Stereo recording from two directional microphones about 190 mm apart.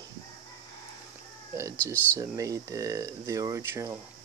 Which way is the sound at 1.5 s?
15° right (ahead or behind).